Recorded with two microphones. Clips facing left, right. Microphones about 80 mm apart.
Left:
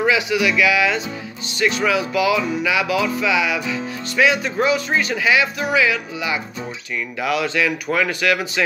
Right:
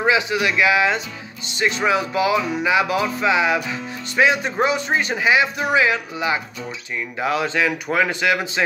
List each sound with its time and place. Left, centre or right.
0.0 s music: right